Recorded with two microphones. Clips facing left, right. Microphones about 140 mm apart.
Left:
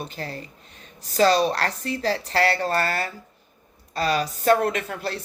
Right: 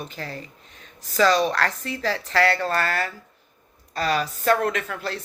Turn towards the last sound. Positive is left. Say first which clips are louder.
# even
turn(degrees=35)  # may be behind; listen again after turning